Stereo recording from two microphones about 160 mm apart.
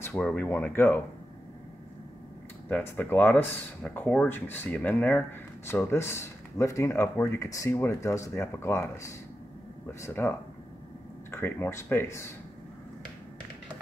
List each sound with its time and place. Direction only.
0.0 s speech: 5° left (ahead or behind)
2.7 s speech: 10° left (ahead or behind)
11.3 s speech: 15° left (ahead or behind)